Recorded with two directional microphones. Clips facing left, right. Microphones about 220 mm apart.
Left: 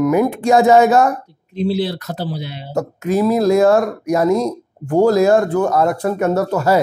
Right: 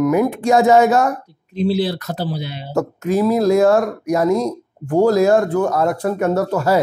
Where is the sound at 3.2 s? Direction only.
25° left (ahead or behind).